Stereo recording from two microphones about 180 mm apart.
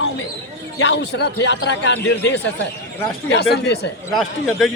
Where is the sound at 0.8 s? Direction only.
80° left.